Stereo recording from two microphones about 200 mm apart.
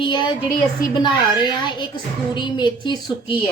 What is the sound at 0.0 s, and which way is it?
A woman's voice, 20° left (ahead or behind).